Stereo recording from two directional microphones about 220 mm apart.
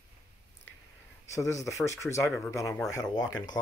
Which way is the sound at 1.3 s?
15° left (ahead or behind).